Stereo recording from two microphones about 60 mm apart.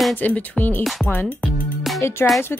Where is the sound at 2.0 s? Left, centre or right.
Left.